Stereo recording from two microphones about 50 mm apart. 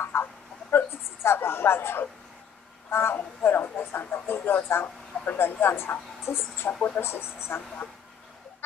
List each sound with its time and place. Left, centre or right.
0.2 s a sound: left
2.9 s a woman's voice: left
6.7 s speech: left
7.0 s speech: left